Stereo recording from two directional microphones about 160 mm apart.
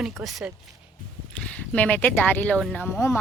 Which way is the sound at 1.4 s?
10° left (ahead or behind).